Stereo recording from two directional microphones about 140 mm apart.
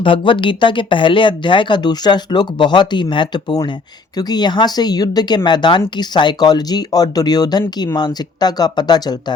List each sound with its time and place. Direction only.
0.0 s speech: 35° left (ahead or behind)